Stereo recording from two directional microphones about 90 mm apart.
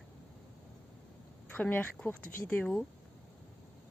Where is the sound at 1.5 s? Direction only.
15° left (ahead or behind).